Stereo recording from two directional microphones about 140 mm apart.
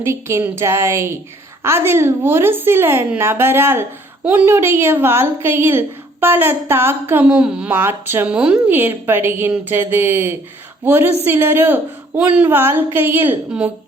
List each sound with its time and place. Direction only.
0.0 s a woman's voice: 20° right (ahead or behind)